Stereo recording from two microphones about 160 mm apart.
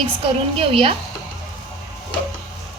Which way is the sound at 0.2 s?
35° right (ahead or behind).